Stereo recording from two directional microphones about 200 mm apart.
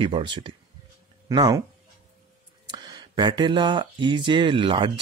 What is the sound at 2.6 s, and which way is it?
Speech, 20° right (ahead or behind).